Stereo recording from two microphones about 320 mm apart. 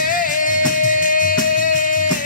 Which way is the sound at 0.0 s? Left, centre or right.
Left.